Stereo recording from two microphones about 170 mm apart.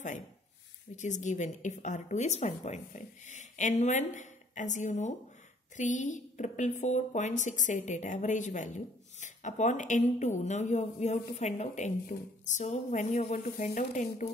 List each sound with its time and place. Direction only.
0.9 s a woman's voice: 45° left (ahead or behind)